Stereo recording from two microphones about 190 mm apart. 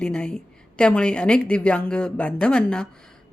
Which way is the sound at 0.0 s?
5° left (ahead or behind).